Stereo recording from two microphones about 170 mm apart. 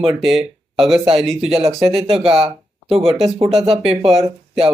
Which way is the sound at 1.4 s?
35° right (ahead or behind).